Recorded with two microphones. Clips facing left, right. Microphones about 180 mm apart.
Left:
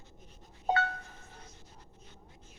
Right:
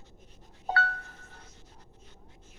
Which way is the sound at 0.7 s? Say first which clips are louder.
Left 2 dB; 20° left (ahead or behind).